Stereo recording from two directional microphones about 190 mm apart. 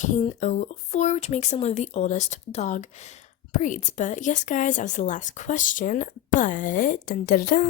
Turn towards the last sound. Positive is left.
turn(degrees=50)  # may be behind; listen again after turning